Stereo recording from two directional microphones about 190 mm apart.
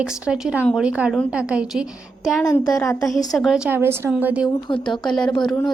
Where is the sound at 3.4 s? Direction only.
5° right (ahead or behind).